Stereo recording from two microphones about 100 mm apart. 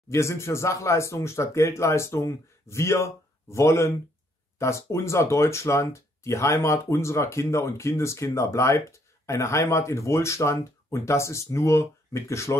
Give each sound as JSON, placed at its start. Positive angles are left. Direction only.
{"t": 0.1, "sound": "speech", "side_deg": 30}